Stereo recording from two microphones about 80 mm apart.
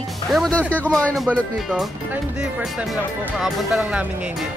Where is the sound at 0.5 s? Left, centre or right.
Centre.